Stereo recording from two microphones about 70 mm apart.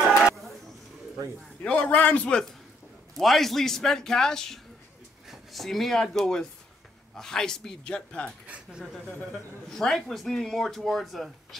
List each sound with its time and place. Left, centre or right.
0.0 s a sound: centre
1.6 s a man's voice: centre
3.2 s a man's voice: centre
8.5 s speech: centre
9.0 s a man's voice: centre
9.7 s speech: centre